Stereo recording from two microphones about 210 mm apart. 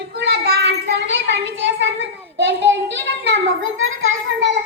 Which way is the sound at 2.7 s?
60° right (ahead or behind).